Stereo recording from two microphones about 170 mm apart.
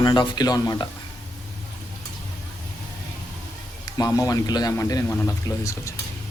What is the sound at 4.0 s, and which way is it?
Speech, 20° left (ahead or behind).